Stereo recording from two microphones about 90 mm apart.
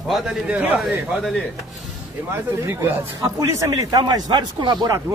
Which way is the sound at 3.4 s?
40° right (ahead or behind).